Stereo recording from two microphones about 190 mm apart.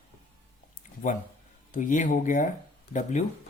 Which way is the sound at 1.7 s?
40° left (ahead or behind).